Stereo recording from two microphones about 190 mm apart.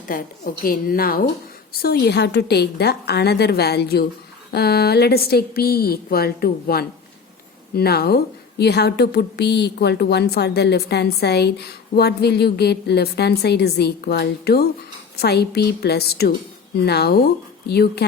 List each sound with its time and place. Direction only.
0.1 s a woman's voice: 45° left (ahead or behind)